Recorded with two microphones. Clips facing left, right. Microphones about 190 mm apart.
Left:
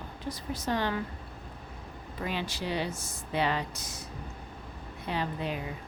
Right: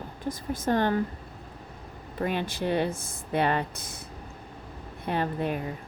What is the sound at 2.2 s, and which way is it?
A woman's voice, 50° right (ahead or behind).